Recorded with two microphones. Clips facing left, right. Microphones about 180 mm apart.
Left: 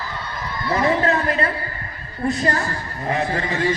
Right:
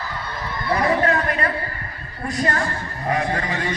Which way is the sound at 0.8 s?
25° left (ahead or behind).